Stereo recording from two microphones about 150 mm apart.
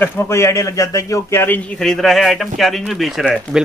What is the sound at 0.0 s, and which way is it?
A man's voice, 15° left (ahead or behind).